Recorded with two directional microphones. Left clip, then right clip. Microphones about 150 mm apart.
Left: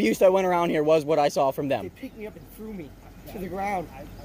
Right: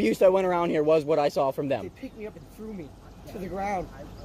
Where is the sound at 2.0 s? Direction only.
Centre (ahead or behind).